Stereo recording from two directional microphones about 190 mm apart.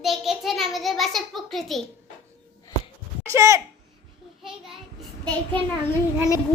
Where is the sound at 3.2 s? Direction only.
15° right (ahead or behind).